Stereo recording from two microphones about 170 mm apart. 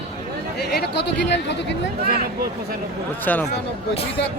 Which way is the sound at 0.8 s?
85° left.